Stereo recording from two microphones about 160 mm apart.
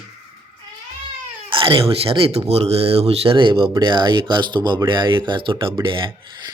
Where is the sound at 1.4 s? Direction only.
35° right (ahead or behind).